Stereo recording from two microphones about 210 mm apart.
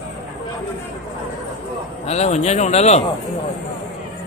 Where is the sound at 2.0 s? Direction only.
30° left (ahead or behind).